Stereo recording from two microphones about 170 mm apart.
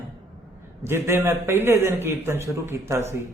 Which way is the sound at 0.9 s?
15° right (ahead or behind).